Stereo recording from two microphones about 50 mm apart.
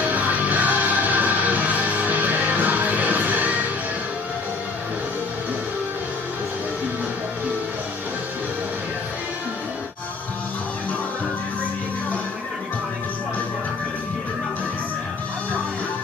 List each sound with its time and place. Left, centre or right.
0.0 s music: right